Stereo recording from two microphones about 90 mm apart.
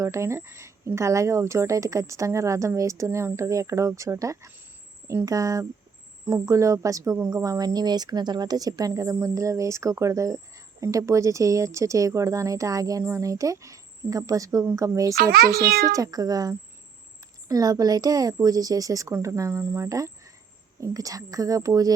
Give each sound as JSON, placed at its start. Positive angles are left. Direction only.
{"t": 0.0, "sound": "a woman's voice", "side_deg": -35}